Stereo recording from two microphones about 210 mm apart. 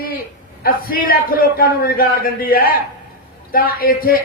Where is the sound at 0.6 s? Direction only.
45° left (ahead or behind).